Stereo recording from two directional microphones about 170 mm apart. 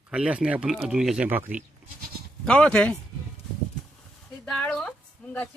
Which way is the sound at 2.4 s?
5° left (ahead or behind).